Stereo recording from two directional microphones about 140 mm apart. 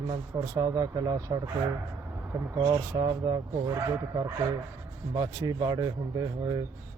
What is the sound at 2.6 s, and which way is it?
Speech, 30° right (ahead or behind).